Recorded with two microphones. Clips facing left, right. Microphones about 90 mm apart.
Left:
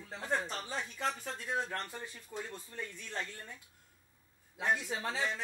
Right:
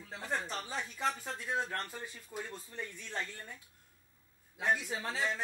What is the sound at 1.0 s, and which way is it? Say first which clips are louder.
Speech: right 3 dB; 15° right (ahead or behind).